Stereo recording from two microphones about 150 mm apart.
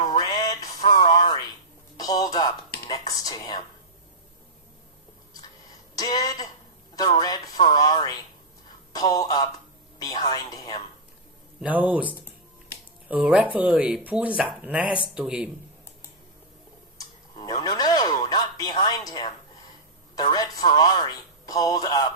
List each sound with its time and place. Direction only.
0.0 s music: 25° left (ahead or behind)
0.9 s a sound: 30° left (ahead or behind)
2.0 s music: 25° left (ahead or behind)
6.0 s speech: 25° left (ahead or behind)
11.6 s speech: 10° right (ahead or behind)
17.0 s a sound: 25° left (ahead or behind)
20.1 s speech: 25° left (ahead or behind)